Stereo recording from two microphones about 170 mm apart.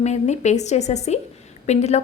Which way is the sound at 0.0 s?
40° left (ahead or behind).